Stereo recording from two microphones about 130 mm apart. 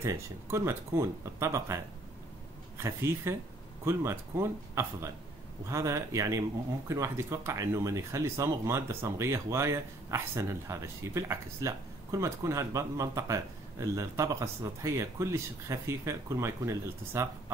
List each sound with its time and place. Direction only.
0.0 s speech: 20° right (ahead or behind)
2.8 s speech: 20° right (ahead or behind)